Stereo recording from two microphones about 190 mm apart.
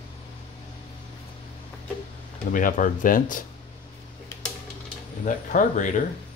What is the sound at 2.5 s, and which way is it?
Speech, 45° left (ahead or behind).